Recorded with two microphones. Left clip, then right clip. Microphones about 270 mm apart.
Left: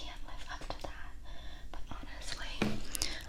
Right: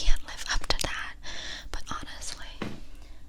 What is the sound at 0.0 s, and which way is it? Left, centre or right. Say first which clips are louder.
Whispering: right 12 dB; right.